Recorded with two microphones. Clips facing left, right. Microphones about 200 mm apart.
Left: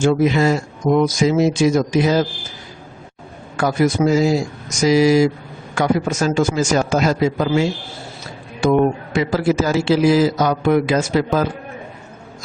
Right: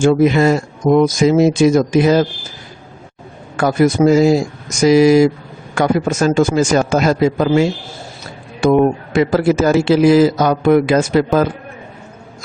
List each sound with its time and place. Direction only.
0.0 s speech: 55° right (ahead or behind)
3.6 s a man's voice: 50° right (ahead or behind)